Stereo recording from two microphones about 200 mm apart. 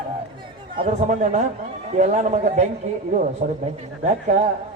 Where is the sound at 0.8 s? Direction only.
35° right (ahead or behind).